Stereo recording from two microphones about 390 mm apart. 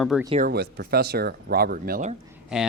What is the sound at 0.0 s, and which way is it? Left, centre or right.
Speech, centre.